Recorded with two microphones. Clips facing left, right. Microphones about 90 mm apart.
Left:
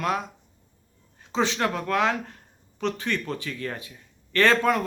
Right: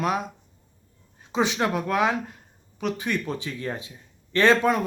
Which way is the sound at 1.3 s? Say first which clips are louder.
Right 1 dB; 15° right (ahead or behind).